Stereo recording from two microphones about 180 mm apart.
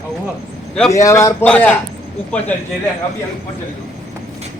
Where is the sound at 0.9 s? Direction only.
15° left (ahead or behind).